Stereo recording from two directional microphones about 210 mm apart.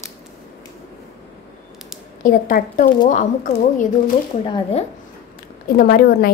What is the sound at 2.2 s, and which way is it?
A woman's voice, 40° left (ahead or behind).